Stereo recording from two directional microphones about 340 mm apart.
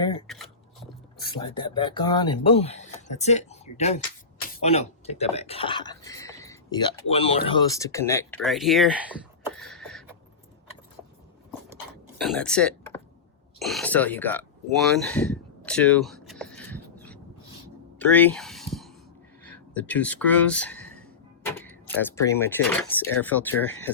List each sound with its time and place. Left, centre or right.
0.3 s speech: centre
1.2 s speech: centre
9.6 s a sound: centre
12.2 s speech: centre
18.0 s a sound: centre
19.5 s speech: centre